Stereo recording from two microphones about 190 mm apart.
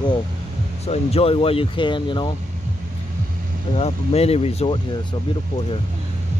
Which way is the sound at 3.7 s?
35° left (ahead or behind).